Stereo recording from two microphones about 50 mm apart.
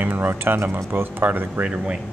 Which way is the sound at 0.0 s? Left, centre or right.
Right.